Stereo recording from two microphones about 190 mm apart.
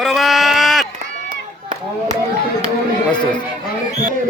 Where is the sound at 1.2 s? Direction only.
45° right (ahead or behind).